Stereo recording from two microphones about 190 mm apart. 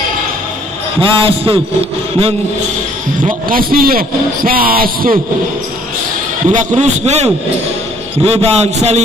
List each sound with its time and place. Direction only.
1.0 s a man's voice: 30° right (ahead or behind)
3.3 s a man's voice: 50° right (ahead or behind)
6.5 s a man's voice: 35° right (ahead or behind)